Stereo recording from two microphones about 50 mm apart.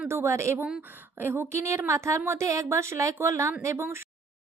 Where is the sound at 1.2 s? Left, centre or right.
Right.